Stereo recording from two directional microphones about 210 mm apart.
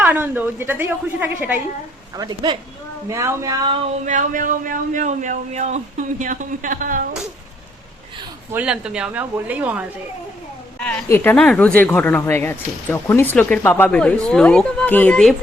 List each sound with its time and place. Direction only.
0.0 s a woman's voice: 10° right (ahead or behind)
2.1 s a woman's voice: 20° right (ahead or behind)
4.0 s speech: 35° right (ahead or behind)
8.5 s a woman's voice: 5° right (ahead or behind)
10.8 s a woman's voice: 5° left (ahead or behind)